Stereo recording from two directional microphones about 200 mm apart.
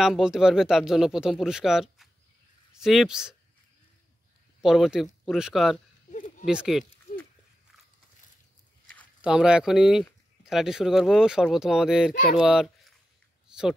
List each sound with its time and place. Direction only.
0.0 s speech: 5° right (ahead or behind)
4.6 s speech: centre (ahead or behind)
6.1 s a sound: 40° left (ahead or behind)
6.4 s speech: 5° right (ahead or behind)
9.2 s speech: 5° right (ahead or behind)
12.1 s speech: 45° left (ahead or behind)
12.4 s speech: centre (ahead or behind)
13.5 s a sound: 5° right (ahead or behind)